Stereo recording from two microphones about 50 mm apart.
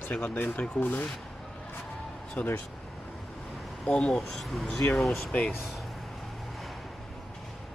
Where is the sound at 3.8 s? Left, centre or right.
Centre.